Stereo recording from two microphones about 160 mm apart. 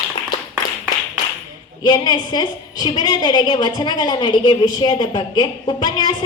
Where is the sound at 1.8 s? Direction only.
25° left (ahead or behind).